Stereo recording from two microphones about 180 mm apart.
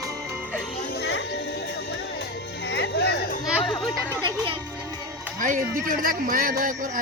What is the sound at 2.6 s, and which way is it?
Music, 75° left (ahead or behind).